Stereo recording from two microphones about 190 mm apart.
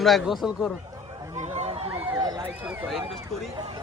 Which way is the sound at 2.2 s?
20° right (ahead or behind).